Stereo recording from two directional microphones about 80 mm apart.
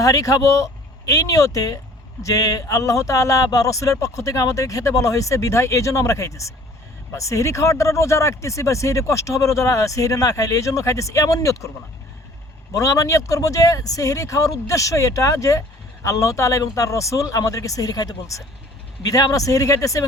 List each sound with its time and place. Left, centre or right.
0.0 s speech: left
12.7 s speech: left